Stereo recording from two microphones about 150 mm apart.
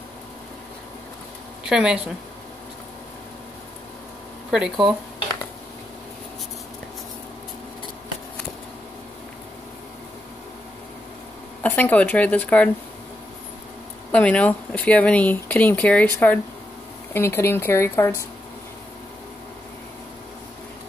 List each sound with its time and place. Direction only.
1.7 s speech: 5° right (ahead or behind)
4.5 s speech: 5° right (ahead or behind)
11.6 s speech: 10° left (ahead or behind)
14.1 s speech: 10° left (ahead or behind)